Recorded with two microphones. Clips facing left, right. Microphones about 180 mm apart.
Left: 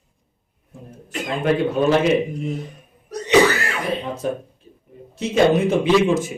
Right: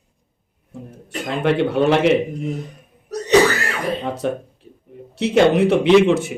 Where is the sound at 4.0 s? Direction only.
65° right (ahead or behind).